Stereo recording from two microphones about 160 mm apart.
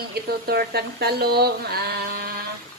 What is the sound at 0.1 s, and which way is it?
Speech, 80° right.